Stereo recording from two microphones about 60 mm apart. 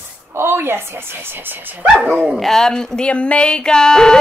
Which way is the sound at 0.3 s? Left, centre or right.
Right.